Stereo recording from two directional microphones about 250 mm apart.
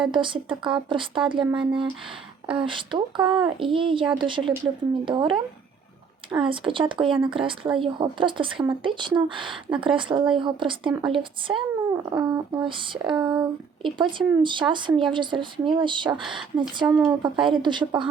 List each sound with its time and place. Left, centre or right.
0.1 s speech: centre
6.4 s speech: centre